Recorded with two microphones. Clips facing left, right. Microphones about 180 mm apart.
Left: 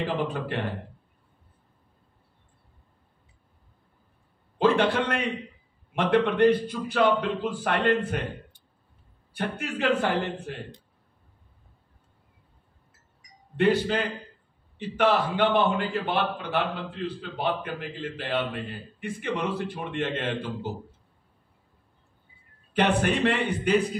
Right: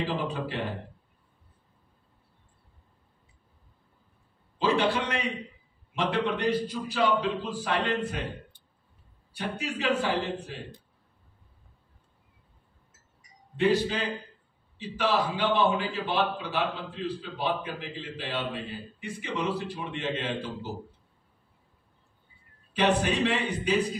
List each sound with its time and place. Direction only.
0.0 s a man's voice: 55° left (ahead or behind)
4.6 s a man's voice: 60° left (ahead or behind)
9.3 s a man's voice: 55° left (ahead or behind)
13.6 s a man's voice: 55° left (ahead or behind)
22.8 s a man's voice: 55° left (ahead or behind)